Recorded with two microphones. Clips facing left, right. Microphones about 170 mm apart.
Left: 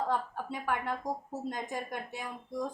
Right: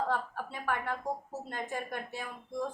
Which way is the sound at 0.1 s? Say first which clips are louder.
Left 1 dB; 15° left (ahead or behind).